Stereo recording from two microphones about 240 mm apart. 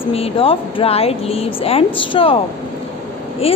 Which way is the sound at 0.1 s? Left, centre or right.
Left.